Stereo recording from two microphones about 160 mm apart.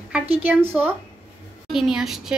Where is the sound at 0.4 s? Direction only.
10° right (ahead or behind).